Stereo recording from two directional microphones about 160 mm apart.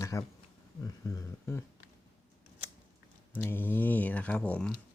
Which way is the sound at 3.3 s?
15° left (ahead or behind).